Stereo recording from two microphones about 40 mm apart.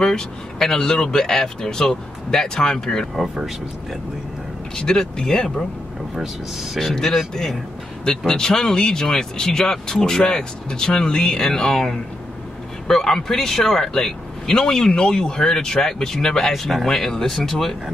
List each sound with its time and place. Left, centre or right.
0.0 s speech: centre
4.7 s speech: centre
6.1 s speech: centre
6.8 s speech: centre